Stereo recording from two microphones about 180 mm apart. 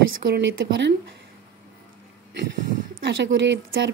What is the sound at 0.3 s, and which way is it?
Speech, 80° right.